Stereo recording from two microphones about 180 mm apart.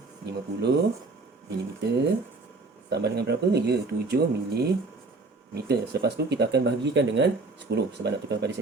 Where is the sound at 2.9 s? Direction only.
70° right (ahead or behind).